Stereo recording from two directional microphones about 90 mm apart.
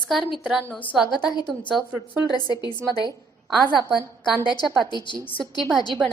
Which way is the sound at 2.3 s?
50° left (ahead or behind).